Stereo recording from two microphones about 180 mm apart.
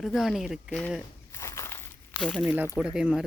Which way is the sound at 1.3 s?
15° left (ahead or behind).